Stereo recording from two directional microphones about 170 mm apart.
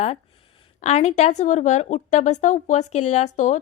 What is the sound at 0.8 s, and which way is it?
Speech, 40° left (ahead or behind).